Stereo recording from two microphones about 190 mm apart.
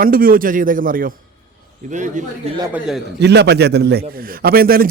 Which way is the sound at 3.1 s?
60° right (ahead or behind).